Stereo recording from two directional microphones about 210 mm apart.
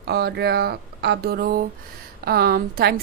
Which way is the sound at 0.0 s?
50° right (ahead or behind).